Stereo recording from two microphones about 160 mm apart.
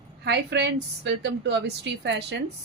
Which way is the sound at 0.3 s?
90° right.